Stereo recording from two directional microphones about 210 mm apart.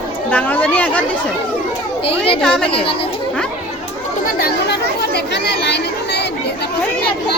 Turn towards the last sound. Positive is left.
turn(degrees=55)  # may be behind; listen again after turning